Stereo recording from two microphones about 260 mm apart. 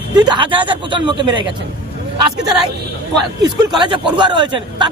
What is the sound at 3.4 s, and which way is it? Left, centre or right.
Speech, centre.